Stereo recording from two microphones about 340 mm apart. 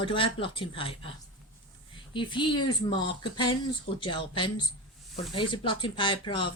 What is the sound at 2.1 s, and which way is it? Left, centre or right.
Speech, centre.